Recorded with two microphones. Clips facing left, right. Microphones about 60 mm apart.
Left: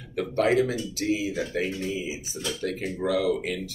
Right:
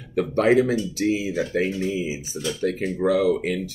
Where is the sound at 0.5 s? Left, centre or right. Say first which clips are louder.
Right 7 dB; right.